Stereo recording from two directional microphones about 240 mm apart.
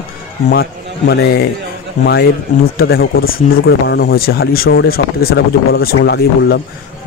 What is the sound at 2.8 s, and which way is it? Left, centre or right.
Speech, left.